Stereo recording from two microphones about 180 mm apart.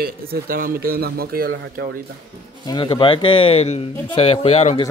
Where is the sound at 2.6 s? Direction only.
25° left (ahead or behind).